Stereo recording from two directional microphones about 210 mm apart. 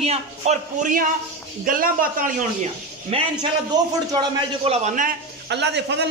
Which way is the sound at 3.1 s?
30° right (ahead or behind).